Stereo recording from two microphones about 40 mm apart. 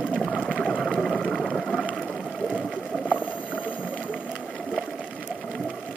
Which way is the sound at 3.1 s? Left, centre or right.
Left.